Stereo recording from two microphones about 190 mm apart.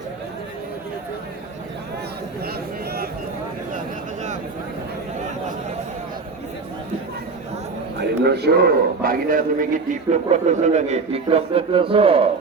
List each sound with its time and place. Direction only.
7.9 s a man's voice: 60° right (ahead or behind); by 12.3 s 30° right (ahead or behind)